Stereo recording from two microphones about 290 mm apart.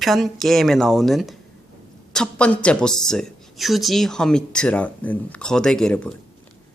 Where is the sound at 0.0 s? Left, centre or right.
Centre.